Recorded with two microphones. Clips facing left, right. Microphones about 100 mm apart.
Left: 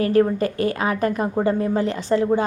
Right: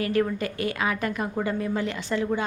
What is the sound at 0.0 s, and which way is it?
A woman's voice, 35° left (ahead or behind).